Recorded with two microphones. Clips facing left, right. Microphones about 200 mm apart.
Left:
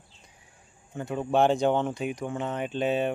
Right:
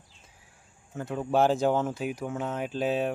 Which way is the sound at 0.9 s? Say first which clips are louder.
Left 1 dB; centre (ahead or behind).